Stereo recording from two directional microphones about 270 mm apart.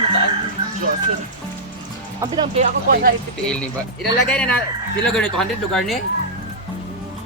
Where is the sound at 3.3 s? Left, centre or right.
Centre.